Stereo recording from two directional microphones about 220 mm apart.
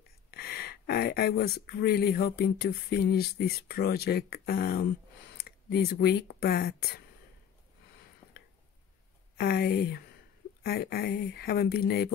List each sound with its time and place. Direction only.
0.3 s speech: 45° left (ahead or behind)
9.4 s speech: 45° left (ahead or behind)